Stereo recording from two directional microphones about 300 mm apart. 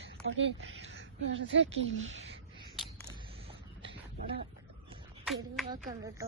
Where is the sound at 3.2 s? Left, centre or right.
Centre.